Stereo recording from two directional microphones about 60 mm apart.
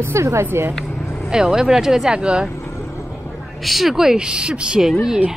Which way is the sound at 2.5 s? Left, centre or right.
Left.